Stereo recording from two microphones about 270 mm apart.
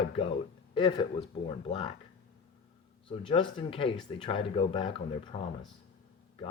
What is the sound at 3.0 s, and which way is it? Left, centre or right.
Speech, centre.